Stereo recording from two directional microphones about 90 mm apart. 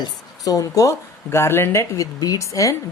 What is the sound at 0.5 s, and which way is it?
Speech, 35° left (ahead or behind).